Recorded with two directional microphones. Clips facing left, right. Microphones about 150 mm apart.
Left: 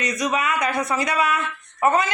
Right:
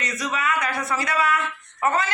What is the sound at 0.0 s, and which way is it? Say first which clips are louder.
A man's voice: left 4 dB; 20° left (ahead or behind).